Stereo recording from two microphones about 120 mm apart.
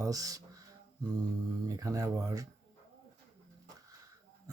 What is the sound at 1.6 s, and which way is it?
Speech, 25° right (ahead or behind).